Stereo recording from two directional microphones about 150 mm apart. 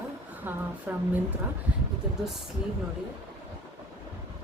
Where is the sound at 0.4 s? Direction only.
10° right (ahead or behind).